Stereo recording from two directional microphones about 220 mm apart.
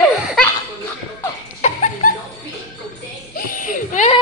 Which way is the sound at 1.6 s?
35° left (ahead or behind).